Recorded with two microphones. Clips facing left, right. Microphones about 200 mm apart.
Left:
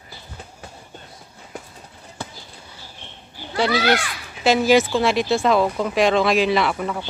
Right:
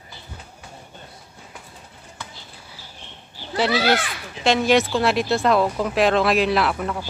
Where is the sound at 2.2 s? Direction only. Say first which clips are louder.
Left 6 dB; 35° left (ahead or behind).